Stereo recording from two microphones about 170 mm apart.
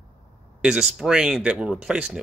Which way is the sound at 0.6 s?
5° right (ahead or behind).